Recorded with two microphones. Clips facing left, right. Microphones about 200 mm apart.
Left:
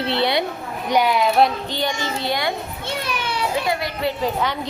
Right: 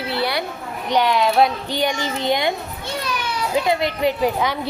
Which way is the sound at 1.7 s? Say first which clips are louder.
Right 2 dB; 15° right (ahead or behind).